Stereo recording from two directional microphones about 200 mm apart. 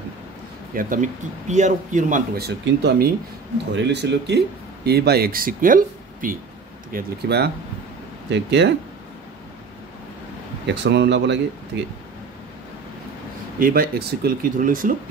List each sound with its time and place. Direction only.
0.7 s speech: 40° right (ahead or behind); by 8.7 s 60° right (ahead or behind)
10.7 s speech: 60° right (ahead or behind)
13.6 s speech: 45° right (ahead or behind)